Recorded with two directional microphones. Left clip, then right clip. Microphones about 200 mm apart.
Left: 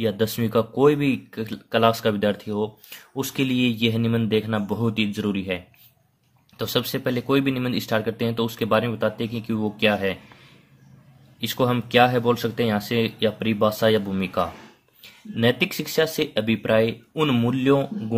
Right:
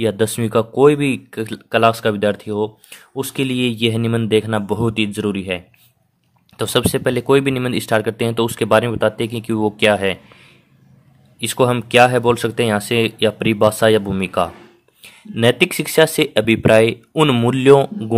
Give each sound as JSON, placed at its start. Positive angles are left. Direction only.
{"t": 0.0, "sound": "speech", "side_deg": -30}
{"t": 11.3, "sound": "speech", "side_deg": -30}